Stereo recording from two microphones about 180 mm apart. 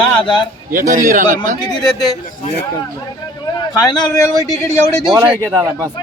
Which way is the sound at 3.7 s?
20° left (ahead or behind).